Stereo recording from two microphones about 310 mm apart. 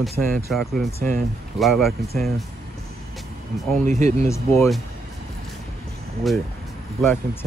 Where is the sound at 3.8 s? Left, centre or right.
Right.